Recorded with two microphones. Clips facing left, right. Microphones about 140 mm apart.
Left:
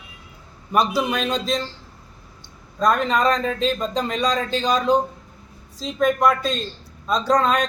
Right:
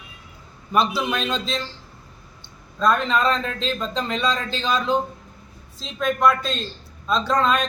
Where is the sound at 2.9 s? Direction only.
45° left (ahead or behind).